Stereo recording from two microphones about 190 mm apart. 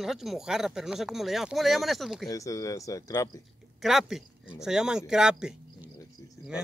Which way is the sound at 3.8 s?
Centre (ahead or behind).